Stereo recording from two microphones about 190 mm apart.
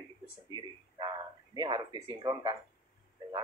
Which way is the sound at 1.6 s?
25° right (ahead or behind).